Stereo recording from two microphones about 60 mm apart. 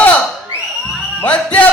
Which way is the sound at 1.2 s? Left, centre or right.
Left.